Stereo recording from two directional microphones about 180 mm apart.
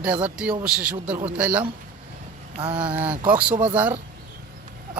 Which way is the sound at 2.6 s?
30° right (ahead or behind).